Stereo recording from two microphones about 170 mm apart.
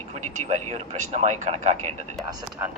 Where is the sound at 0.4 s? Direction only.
45° right (ahead or behind).